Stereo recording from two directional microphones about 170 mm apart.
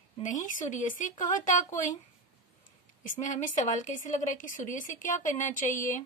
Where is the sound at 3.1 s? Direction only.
45° left (ahead or behind).